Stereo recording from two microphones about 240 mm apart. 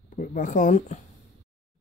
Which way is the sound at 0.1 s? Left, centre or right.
Left.